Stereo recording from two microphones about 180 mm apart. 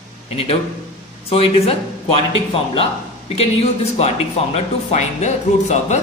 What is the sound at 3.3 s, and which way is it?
A man's voice, 35° left (ahead or behind).